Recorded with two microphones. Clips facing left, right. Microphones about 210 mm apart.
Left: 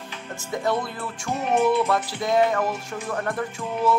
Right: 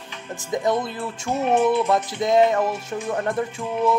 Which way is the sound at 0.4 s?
15° right (ahead or behind).